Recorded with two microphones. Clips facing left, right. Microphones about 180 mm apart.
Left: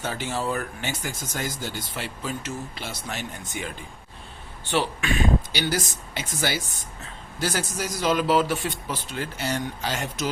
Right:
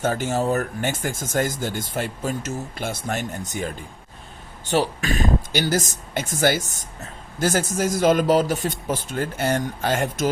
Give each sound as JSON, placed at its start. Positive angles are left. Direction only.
{"t": 0.0, "sound": "speech", "side_deg": -45}